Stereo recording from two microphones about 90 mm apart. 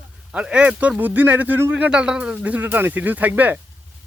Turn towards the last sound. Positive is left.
turn(degrees=-20)  # may be behind; listen again after turning